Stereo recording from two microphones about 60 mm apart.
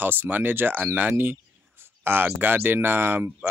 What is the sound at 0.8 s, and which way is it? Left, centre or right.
Speech, right.